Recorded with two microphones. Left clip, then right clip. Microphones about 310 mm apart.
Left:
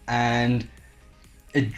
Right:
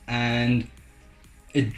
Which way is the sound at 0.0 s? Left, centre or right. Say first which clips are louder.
Left 4 dB; left.